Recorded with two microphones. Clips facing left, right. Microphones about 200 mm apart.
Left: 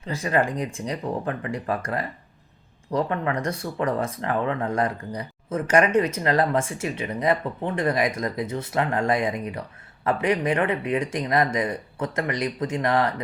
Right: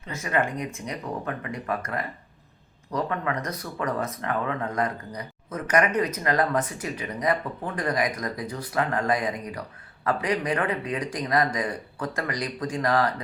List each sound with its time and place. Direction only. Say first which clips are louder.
0.0 s speech: left 3 dB; 30° left (ahead or behind)